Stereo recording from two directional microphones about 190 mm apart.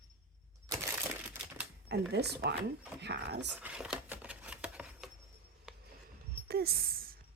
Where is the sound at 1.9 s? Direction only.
65° right (ahead or behind).